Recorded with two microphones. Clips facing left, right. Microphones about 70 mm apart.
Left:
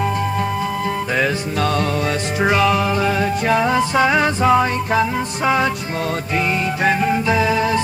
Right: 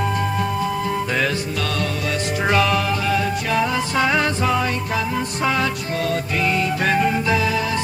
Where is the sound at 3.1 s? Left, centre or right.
Left.